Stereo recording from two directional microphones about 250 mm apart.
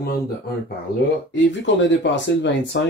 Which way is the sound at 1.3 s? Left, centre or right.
Left.